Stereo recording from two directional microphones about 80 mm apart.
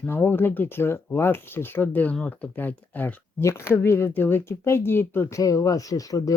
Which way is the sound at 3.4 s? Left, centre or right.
Left.